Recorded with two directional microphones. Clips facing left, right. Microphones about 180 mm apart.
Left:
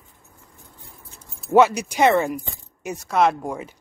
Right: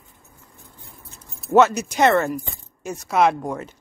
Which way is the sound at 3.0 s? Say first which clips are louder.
Right 1 dB; centre (ahead or behind).